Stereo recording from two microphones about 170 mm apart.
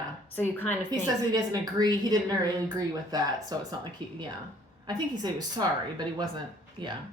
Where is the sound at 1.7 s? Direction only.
25° right (ahead or behind).